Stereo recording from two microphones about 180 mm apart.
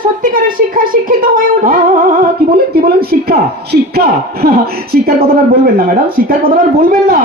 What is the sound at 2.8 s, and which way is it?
Speech, 60° right (ahead or behind).